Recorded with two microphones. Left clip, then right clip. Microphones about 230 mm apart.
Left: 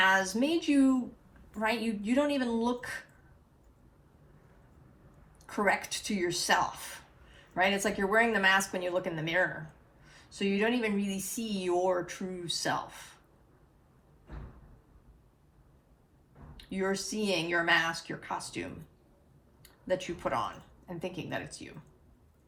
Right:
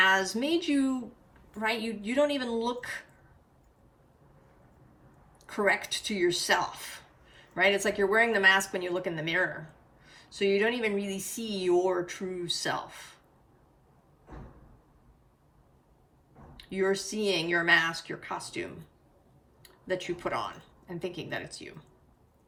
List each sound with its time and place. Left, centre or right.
0.0 s speech: centre
5.5 s speech: centre
16.6 s a woman's voice: centre